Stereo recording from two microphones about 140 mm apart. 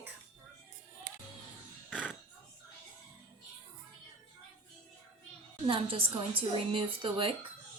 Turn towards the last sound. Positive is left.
turn(degrees=-40)  # may be behind; listen again after turning